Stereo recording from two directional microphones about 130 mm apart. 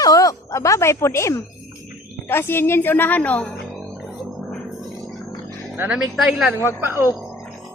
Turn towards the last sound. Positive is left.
turn(degrees=-20)  # may be behind; listen again after turning